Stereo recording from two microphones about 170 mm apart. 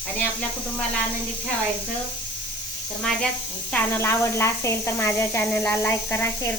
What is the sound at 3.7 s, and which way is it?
A woman's voice, 15° left (ahead or behind).